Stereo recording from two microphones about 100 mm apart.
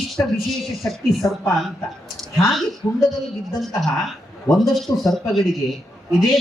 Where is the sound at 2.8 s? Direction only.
40° left (ahead or behind).